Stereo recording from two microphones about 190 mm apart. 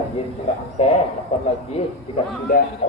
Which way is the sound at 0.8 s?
35° left (ahead or behind).